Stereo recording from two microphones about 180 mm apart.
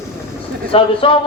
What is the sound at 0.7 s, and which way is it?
Speech, 30° left (ahead or behind).